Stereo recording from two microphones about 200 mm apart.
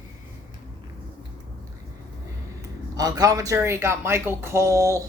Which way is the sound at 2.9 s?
20° right (ahead or behind).